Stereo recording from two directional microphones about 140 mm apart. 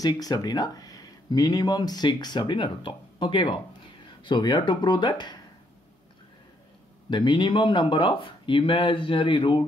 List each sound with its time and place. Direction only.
0.0 s speech: 25° left (ahead or behind)
7.1 s speech: 35° left (ahead or behind)